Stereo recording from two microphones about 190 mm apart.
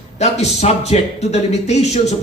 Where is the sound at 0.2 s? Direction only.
35° left (ahead or behind).